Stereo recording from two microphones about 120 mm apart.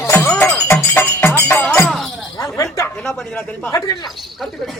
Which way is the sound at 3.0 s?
5° left (ahead or behind).